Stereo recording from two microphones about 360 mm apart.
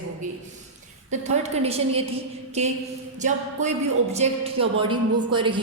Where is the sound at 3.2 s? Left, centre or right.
Centre.